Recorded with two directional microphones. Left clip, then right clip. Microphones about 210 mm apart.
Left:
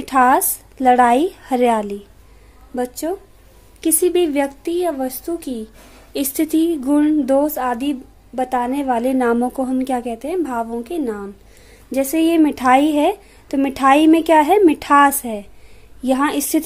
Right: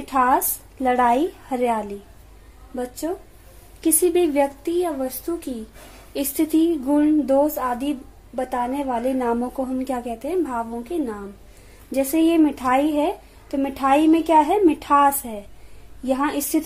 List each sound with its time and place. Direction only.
0.0 s a woman's voice: 40° left (ahead or behind)
3.8 s a woman's voice: 30° left (ahead or behind)
6.1 s a woman's voice: 30° left (ahead or behind)
11.9 s a woman's voice: 25° left (ahead or behind)